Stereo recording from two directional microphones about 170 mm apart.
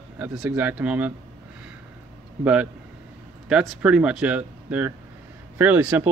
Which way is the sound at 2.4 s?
10° right (ahead or behind).